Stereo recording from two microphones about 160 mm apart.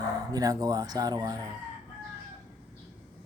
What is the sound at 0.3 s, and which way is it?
Speech, 25° right (ahead or behind).